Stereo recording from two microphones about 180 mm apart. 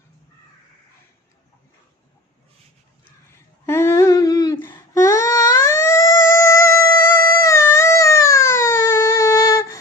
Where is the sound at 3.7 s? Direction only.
15° left (ahead or behind).